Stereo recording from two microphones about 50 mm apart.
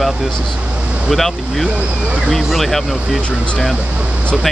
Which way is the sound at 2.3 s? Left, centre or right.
Centre.